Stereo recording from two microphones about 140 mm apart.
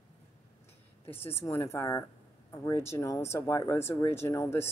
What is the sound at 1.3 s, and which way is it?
Speech, 15° left (ahead or behind).